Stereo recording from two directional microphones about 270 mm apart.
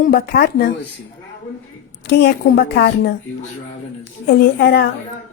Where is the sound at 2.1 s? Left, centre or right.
Left.